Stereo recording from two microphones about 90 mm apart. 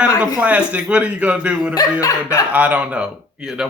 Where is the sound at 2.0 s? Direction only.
35° left (ahead or behind).